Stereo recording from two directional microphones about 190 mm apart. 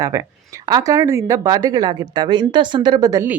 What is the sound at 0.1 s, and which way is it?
Speech, 15° right (ahead or behind).